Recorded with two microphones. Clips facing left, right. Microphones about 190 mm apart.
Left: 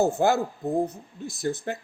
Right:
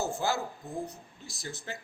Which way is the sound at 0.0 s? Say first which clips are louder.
Left 9 dB; 55° left (ahead or behind).